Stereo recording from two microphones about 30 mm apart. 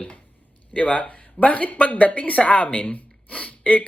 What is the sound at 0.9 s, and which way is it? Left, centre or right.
Speech, left.